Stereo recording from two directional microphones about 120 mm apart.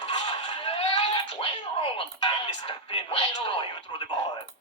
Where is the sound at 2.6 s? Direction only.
45° left (ahead or behind).